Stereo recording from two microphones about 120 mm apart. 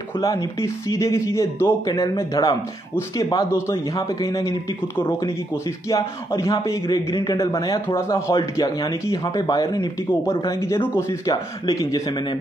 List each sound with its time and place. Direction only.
0.2 s a man's voice: 30° left (ahead or behind)
10.6 s speech: 25° left (ahead or behind)